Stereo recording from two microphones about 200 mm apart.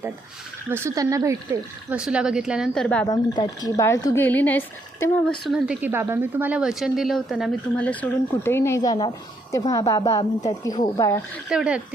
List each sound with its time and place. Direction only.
0.7 s speech: 15° right (ahead or behind)
1.9 s speech: 5° right (ahead or behind)
3.1 s speech: 20° left (ahead or behind)
5.5 s speech: 5° right (ahead or behind); by 11.2 s 20° left (ahead or behind)
11.4 s speech: 5° right (ahead or behind)